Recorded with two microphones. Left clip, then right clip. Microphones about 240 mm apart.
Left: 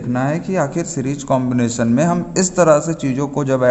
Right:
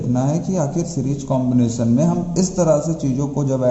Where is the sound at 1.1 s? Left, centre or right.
Left.